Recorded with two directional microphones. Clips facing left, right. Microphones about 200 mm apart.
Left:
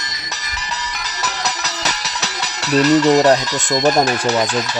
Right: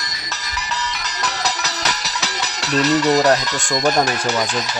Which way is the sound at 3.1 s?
20° left (ahead or behind).